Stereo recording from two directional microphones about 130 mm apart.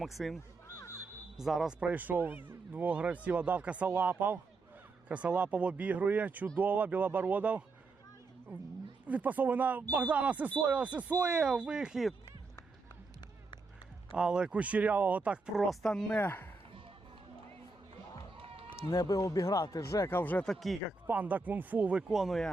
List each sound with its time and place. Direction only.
0.0 s speech: centre (ahead or behind)
1.4 s speech: centre (ahead or behind)
9.0 s speech: 10° right (ahead or behind)
14.1 s speech: 5° right (ahead or behind); by 16.5 s 15° left (ahead or behind)
18.3 s run: 45° right (ahead or behind)
18.8 s speech: 25° left (ahead or behind); by 20.7 s centre (ahead or behind)
21.1 s speech: 10° right (ahead or behind)